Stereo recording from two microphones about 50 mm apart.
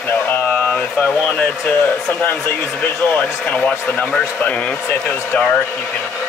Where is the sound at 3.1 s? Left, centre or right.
Left.